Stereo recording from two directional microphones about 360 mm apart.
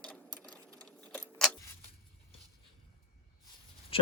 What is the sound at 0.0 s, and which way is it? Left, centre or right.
Keys jangling, centre.